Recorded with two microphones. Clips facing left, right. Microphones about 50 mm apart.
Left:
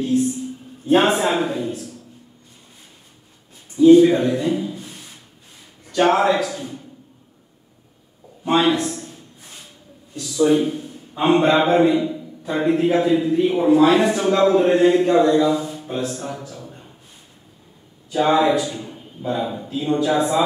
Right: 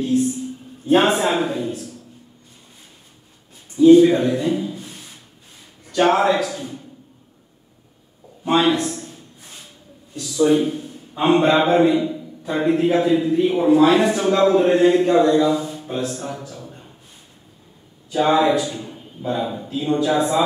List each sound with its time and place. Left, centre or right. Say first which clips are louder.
0.8 s a man's voice: even; centre
3.7 s speech: even; centre
8.5 s a man's voice: even; centre
10.1 s a man's voice: even; centre
18.1 s a man's voice: even; centre